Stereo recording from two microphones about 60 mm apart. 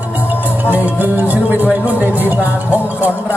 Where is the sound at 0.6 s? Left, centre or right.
Right.